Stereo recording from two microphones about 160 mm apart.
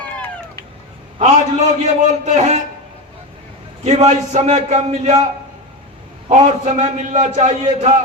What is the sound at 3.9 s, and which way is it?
A man's voice, 45° right (ahead or behind).